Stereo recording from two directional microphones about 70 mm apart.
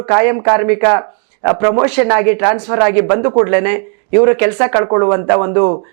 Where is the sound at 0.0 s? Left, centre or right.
Right.